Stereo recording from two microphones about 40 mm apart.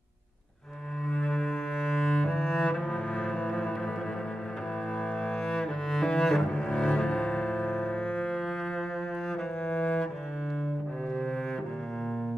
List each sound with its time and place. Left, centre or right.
1.1 s cello: centre
3.2 s music: centre
5.2 s cello: centre
9.7 s cello: left